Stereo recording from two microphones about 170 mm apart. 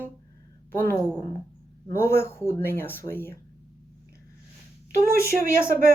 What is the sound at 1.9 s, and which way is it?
Speech, 15° left (ahead or behind).